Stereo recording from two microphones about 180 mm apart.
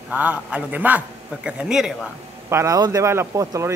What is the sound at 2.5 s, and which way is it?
A man's voice, 15° right (ahead or behind).